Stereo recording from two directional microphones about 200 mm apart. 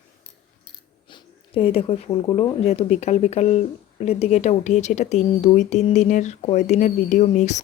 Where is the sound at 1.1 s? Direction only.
30° left (ahead or behind).